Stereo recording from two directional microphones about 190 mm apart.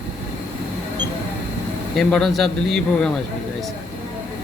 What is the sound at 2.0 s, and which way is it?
Speech, 5° left (ahead or behind).